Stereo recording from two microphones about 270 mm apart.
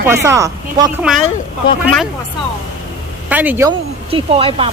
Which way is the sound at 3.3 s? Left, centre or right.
Centre.